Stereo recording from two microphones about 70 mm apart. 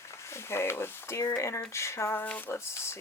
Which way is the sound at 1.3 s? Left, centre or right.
Left.